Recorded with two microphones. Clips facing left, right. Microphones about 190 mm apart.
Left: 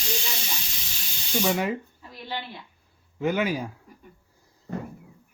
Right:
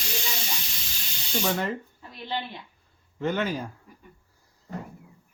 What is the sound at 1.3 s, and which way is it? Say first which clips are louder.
Speech: left 2 dB; 5° left (ahead or behind).